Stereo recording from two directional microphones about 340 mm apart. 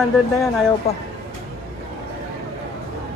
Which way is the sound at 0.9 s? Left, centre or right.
Centre.